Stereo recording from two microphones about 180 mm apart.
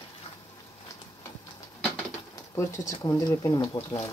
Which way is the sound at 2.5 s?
15° left (ahead or behind).